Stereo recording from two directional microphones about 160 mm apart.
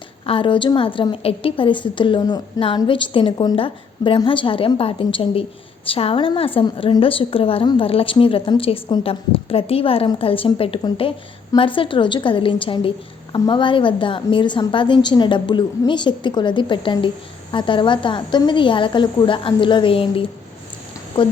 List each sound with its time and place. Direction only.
0.3 s a woman's voice: 35° left (ahead or behind)